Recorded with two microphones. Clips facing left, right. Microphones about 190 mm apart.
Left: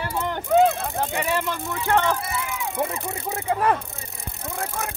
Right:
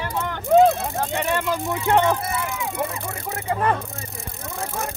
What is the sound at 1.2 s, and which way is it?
Speech, 10° left (ahead or behind).